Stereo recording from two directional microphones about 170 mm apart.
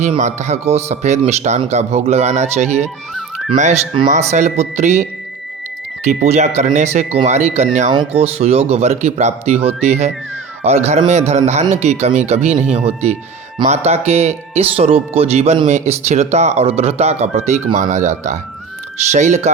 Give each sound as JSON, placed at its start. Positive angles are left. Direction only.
{"t": 0.0, "sound": "speech", "side_deg": -45}
{"t": 6.2, "sound": "speech", "side_deg": -40}